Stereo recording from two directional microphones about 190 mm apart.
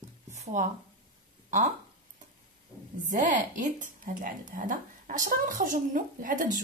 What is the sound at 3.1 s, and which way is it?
Speech, 40° right (ahead or behind).